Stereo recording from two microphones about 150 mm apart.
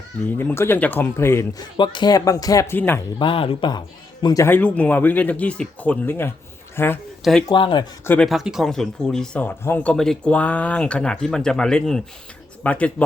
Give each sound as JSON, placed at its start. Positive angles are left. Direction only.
{"t": 0.3, "sound": "speech", "side_deg": 15}
{"t": 1.7, "sound": "speech", "side_deg": 30}
{"t": 3.2, "sound": "speech", "side_deg": 35}
{"t": 4.4, "sound": "speech", "side_deg": 10}
{"t": 7.4, "sound": "speech", "side_deg": 35}
{"t": 8.0, "sound": "speech", "side_deg": 10}
{"t": 8.3, "sound": "speech", "side_deg": 0}